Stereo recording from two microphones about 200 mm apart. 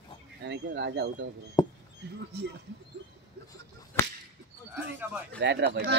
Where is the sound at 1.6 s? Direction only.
15° left (ahead or behind).